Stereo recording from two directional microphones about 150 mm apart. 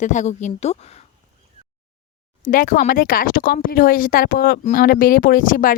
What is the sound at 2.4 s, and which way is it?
Speech, 65° left (ahead or behind).